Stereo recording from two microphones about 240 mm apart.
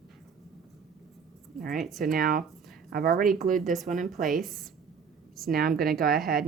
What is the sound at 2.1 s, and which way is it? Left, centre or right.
Speech, right.